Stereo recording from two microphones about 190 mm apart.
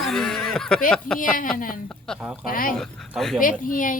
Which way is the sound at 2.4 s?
45° left (ahead or behind).